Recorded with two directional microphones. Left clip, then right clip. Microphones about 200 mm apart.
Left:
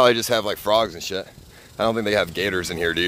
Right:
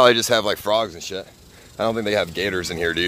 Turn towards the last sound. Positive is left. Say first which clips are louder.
# even
turn(degrees=5)  # may be behind; listen again after turning